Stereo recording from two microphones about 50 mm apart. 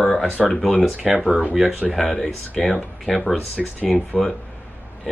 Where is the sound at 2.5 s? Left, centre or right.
Left.